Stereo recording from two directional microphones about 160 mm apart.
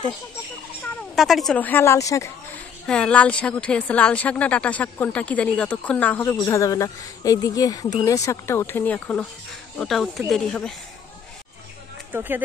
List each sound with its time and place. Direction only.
1.1 s speech: centre (ahead or behind); by 2.3 s 20° left (ahead or behind)
2.9 s speech: 5° left (ahead or behind)
12.1 s speech: 10° right (ahead or behind)